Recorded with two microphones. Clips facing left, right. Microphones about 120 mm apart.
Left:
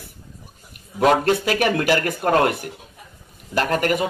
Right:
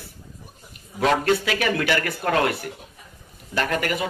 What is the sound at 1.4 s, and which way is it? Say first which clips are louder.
Speech: left 4 dB; 45° left (ahead or behind).